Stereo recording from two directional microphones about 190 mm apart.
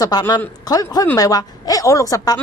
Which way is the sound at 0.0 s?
20° left (ahead or behind).